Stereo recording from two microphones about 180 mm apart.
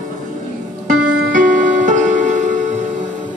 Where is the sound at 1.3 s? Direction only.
45° right (ahead or behind).